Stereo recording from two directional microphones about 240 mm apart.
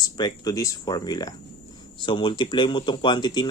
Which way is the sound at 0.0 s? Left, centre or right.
Centre.